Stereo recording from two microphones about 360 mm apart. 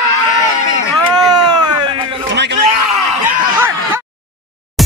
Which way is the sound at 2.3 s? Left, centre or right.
Right.